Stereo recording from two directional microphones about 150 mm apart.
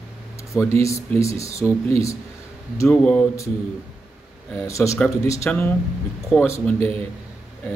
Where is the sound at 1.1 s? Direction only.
20° left (ahead or behind).